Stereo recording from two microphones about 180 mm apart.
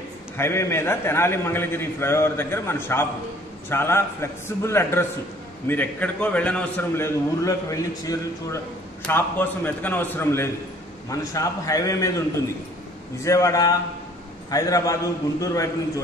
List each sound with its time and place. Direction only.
0.4 s a man's voice: 15° left (ahead or behind)
13.2 s a man's voice: 15° left (ahead or behind)